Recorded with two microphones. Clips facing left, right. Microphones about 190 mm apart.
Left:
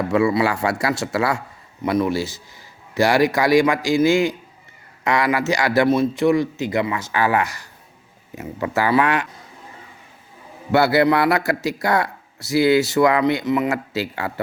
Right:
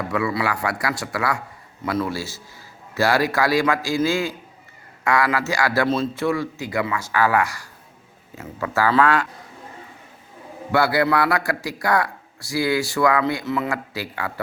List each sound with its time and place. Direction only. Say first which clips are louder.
0.1 s a man's voice: left 6 dB; 25° left (ahead or behind)
10.7 s a man's voice: left 3 dB; 25° left (ahead or behind)